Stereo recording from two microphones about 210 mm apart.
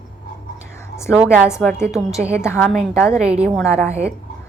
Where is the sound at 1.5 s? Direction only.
15° left (ahead or behind).